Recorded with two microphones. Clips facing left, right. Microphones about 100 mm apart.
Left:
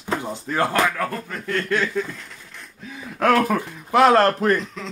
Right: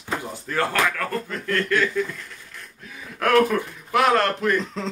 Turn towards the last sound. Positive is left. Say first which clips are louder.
# left 4 dB
turn(degrees=35)  # may be behind; listen again after turning